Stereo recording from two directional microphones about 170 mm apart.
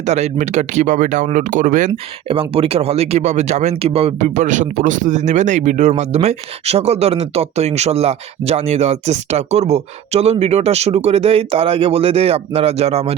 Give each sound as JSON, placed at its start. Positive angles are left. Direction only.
{"t": 0.0, "sound": "speech", "side_deg": -45}
{"t": 2.2, "sound": "speech", "side_deg": -30}